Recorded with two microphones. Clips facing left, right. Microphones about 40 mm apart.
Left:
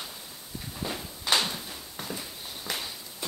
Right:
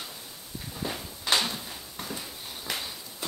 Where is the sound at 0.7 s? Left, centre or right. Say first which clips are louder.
Even; centre.